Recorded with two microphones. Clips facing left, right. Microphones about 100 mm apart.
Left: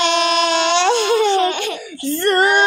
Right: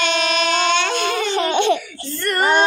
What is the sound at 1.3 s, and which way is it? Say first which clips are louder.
Laughter: even; 20° right (ahead or behind).